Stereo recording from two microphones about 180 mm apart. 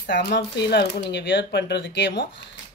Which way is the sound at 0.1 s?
70° left (ahead or behind).